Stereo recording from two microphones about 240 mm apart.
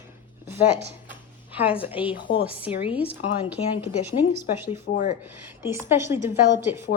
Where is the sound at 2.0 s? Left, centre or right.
Left.